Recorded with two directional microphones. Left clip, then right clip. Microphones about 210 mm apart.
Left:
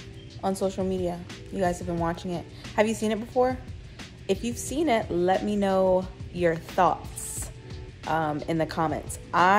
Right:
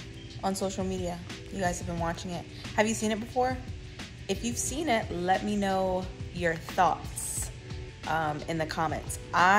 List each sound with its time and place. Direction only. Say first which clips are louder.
0.4 s speech: left 4 dB; 20° left (ahead or behind)
8.1 s speech: left 3 dB; 25° left (ahead or behind)